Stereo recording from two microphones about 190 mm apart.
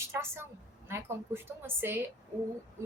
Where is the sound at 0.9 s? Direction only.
15° right (ahead or behind).